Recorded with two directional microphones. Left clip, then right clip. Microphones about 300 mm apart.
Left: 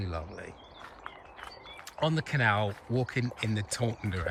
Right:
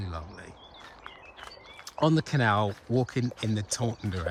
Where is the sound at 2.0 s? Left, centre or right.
Centre.